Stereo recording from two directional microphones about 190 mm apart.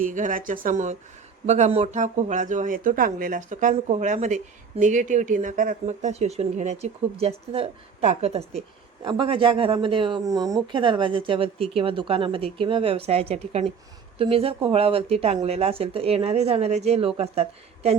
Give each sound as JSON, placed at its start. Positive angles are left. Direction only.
{"t": 0.0, "sound": "speech", "side_deg": -45}